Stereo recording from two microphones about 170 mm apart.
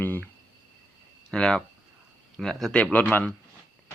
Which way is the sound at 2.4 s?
Centre (ahead or behind).